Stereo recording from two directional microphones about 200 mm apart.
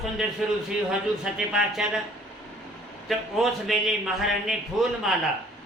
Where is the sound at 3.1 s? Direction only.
Centre (ahead or behind).